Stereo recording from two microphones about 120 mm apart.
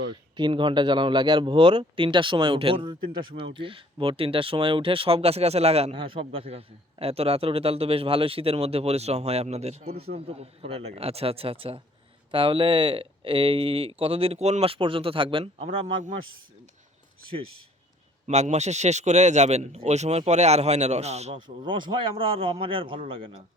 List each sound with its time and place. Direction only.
0.3 s speech: 40° right (ahead or behind)
18.3 s speech: 70° right (ahead or behind)
21.4 s speech: 40° right (ahead or behind)